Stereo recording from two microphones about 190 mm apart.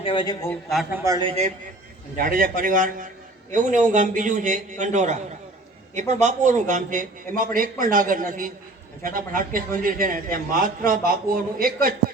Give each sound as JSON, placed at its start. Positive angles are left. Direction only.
{"t": 0.0, "sound": "a man's voice", "side_deg": 25}
{"t": 0.7, "sound": "a man's voice", "side_deg": 0}
{"t": 0.9, "sound": "a man's voice", "side_deg": -20}
{"t": 2.1, "sound": "a man's voice", "side_deg": -45}